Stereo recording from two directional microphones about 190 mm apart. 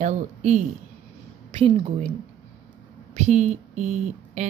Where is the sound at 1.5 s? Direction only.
30° right (ahead or behind).